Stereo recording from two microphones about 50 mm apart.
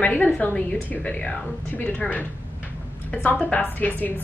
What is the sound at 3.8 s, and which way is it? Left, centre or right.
Speech, left.